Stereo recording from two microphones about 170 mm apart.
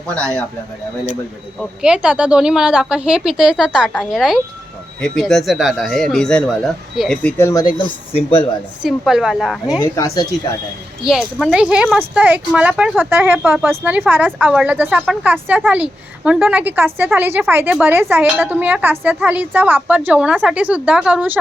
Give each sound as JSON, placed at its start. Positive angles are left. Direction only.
{"t": 0.1, "sound": "speech", "side_deg": 5}
{"t": 1.5, "sound": "speech", "side_deg": -5}
{"t": 7.2, "sound": "speech", "side_deg": 10}
{"t": 7.8, "sound": "speech", "side_deg": 30}
{"t": 8.8, "sound": "speech", "side_deg": 0}
{"t": 9.8, "sound": "speech", "side_deg": 20}
{"t": 11.0, "sound": "speech", "side_deg": 0}